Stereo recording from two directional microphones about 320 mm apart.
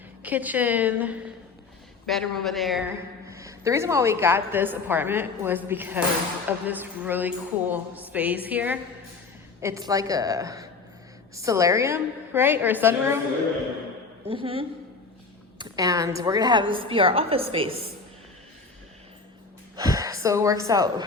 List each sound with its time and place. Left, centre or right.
0.2 s a woman's voice: centre
14.3 s a woman's voice: centre
19.7 s a sound: centre
20.7 s a woman's voice: centre